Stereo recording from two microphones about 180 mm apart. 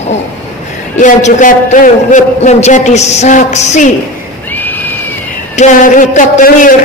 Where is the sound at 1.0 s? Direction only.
45° left (ahead or behind).